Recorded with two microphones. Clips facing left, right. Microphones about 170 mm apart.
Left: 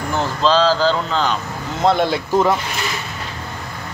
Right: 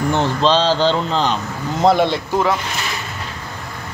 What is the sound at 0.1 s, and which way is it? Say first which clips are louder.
Speech: left 1 dB; 30° right (ahead or behind).